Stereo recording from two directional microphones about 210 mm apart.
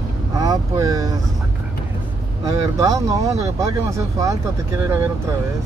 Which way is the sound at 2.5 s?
15° right (ahead or behind).